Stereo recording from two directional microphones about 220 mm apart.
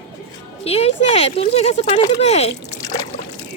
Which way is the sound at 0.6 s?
25° left (ahead or behind).